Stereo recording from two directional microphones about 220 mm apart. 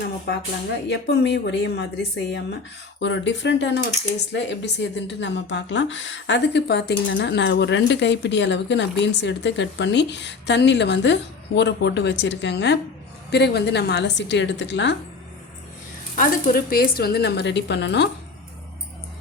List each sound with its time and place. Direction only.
0.9 s speech: 50° left (ahead or behind)
16.1 s speech: 40° left (ahead or behind)